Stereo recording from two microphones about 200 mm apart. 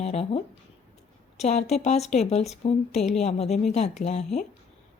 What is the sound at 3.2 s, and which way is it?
Speech, 30° left (ahead or behind).